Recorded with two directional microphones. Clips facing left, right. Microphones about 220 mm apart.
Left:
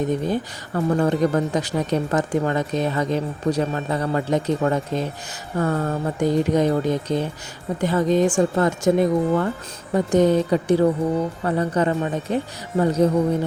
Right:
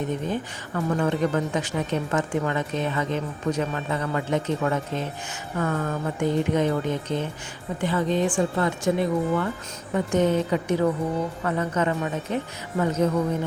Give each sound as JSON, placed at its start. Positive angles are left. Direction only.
{"t": 0.0, "sound": "speech", "side_deg": 35}